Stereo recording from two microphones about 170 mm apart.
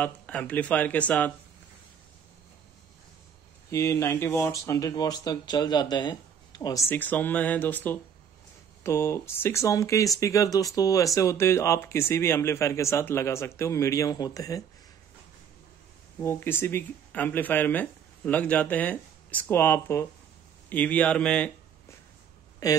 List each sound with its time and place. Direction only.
0.0 s speech: 10° left (ahead or behind)
3.7 s speech: 15° left (ahead or behind)
16.2 s speech: 15° left (ahead or behind)
22.6 s speech: 20° left (ahead or behind)